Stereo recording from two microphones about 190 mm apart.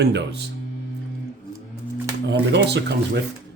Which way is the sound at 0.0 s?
60° right (ahead or behind).